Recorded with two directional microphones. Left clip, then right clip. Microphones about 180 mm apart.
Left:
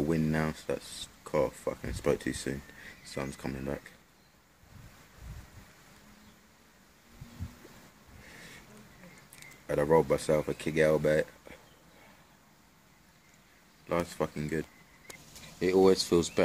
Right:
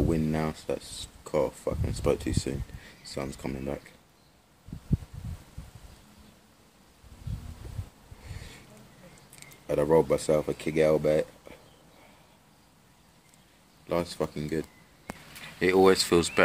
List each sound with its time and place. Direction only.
0.1 s speech: 10° left (ahead or behind)
9.4 s speech: 5° left (ahead or behind)
13.8 s speech: centre (ahead or behind)
15.6 s speech: 15° left (ahead or behind)